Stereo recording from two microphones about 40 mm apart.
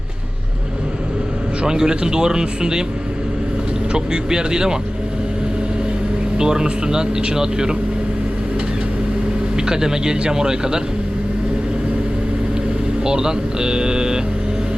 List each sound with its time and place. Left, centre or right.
1.6 s speech: centre
3.9 s speech: centre
6.3 s speech: centre
9.6 s speech: centre
13.1 s speech: centre